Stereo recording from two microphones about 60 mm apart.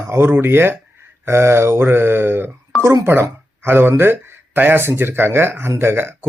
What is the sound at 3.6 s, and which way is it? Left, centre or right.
Speech, right.